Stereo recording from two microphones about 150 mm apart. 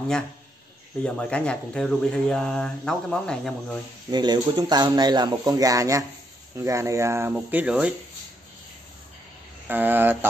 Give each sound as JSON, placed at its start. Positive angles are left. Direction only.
{"t": 1.0, "sound": "speech", "side_deg": 5}
{"t": 4.1, "sound": "speech", "side_deg": -30}
{"t": 9.7, "sound": "speech", "side_deg": -15}